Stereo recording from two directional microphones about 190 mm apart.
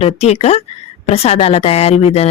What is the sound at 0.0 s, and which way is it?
Speech, 35° left (ahead or behind).